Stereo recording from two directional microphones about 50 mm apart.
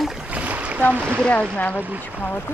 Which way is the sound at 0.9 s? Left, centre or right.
Right.